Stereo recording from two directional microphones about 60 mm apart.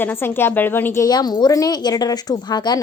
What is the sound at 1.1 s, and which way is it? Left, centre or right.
Speech, left.